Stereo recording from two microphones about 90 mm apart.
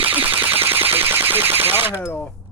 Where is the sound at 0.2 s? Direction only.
20° right (ahead or behind).